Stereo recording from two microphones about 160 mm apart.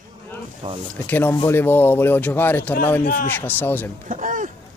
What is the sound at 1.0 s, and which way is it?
A man's voice, 10° left (ahead or behind).